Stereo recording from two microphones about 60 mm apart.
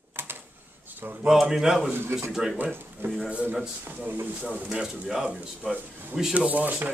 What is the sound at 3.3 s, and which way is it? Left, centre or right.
Speech, right.